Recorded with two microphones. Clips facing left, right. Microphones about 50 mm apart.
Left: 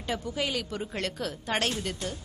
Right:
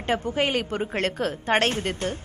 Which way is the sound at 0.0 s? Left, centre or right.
Right.